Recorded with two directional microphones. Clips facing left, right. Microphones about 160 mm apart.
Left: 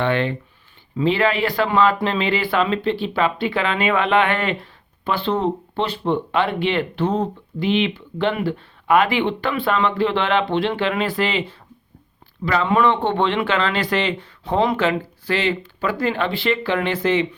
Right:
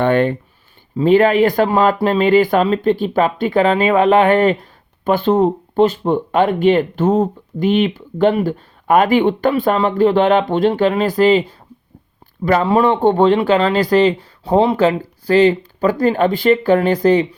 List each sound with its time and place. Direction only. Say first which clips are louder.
0.0 s speech: right 6 dB; 45° right (ahead or behind)